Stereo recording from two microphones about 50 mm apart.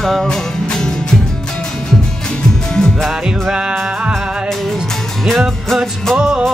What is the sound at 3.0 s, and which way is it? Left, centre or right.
Music, centre.